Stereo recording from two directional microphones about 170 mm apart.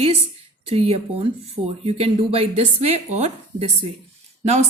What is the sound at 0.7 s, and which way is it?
A woman's voice, 35° right (ahead or behind).